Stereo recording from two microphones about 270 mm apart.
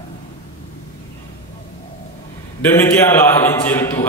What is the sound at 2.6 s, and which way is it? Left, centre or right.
A man's voice, centre.